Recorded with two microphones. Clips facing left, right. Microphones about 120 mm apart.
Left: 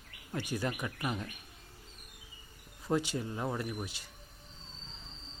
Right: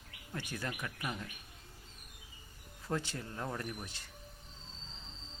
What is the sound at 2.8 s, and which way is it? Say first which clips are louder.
Speech: left 6 dB; 15° left (ahead or behind).